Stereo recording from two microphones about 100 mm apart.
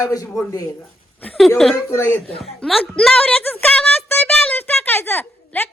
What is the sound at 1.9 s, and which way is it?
Speech, 25° left (ahead or behind).